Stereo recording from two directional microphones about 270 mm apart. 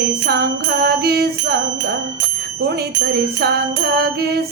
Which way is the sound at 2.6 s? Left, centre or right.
Right.